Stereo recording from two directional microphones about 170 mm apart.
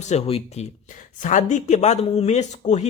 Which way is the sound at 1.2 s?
45° left (ahead or behind).